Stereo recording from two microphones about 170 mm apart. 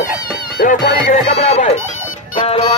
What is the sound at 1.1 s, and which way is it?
Speech, 40° left (ahead or behind).